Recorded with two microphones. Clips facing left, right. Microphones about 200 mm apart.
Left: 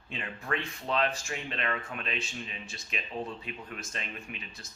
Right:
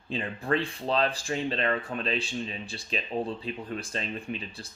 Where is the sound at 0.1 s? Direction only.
30° right (ahead or behind).